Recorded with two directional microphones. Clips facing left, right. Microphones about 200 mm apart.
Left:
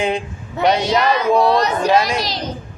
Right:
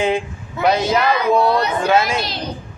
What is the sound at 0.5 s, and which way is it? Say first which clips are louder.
Speech: even; 35° left (ahead or behind).